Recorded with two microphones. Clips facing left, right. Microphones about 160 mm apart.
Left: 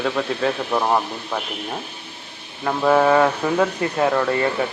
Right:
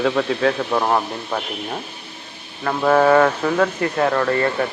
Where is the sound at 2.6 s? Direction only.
10° left (ahead or behind).